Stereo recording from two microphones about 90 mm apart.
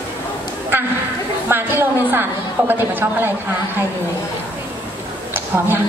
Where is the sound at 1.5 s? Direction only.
25° right (ahead or behind).